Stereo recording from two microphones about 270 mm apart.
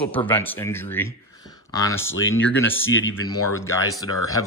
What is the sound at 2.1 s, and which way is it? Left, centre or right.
Speech, left.